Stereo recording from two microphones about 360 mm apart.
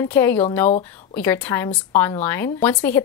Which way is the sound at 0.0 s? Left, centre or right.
Centre.